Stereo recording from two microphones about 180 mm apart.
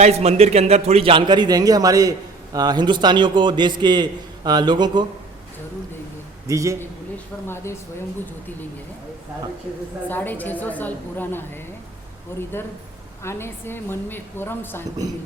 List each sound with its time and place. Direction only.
0.0 s a man's voice: 35° right (ahead or behind)
6.5 s a man's voice: 15° right (ahead or behind)
7.4 s a woman's voice: 15° left (ahead or behind)
10.1 s a woman's voice: 10° left (ahead or behind)